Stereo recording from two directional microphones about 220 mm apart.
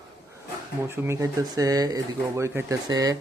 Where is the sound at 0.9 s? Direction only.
10° right (ahead or behind).